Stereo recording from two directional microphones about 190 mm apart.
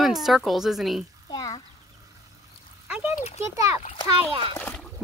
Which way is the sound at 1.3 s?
20° left (ahead or behind).